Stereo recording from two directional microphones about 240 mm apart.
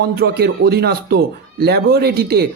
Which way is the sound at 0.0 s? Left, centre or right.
Right.